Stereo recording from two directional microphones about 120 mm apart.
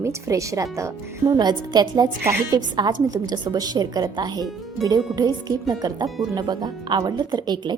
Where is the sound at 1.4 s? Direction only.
35° right (ahead or behind).